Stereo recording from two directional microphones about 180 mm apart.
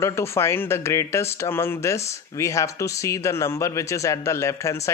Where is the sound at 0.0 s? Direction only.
15° left (ahead or behind).